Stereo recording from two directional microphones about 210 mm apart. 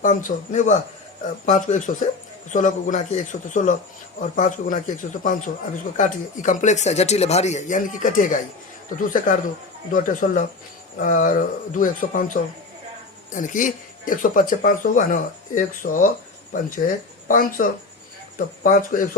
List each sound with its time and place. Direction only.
0.0 s speech: 40° left (ahead or behind)
6.0 s speech: 35° left (ahead or behind)